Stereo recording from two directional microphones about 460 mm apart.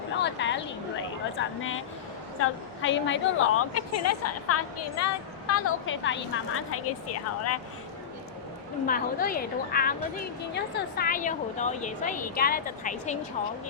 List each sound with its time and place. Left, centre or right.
0.2 s a woman's voice: left
8.9 s a woman's voice: centre